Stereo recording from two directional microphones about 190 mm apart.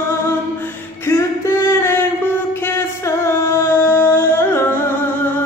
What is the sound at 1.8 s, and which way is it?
Music, 15° left (ahead or behind).